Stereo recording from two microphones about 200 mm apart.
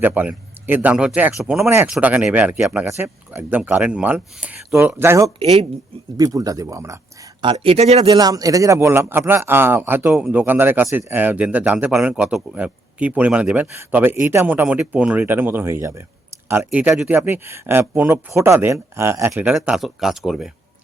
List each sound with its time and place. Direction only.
0.0 s speech: 10° right (ahead or behind)
5.4 s speech: 30° right (ahead or behind)
6.1 s speech: 15° right (ahead or behind)
7.5 s speech: 30° right (ahead or behind)
8.0 s speech: 20° right (ahead or behind); by 20.5 s centre (ahead or behind)